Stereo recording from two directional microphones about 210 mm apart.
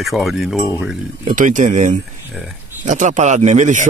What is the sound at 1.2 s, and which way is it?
A man's voice, 40° right (ahead or behind).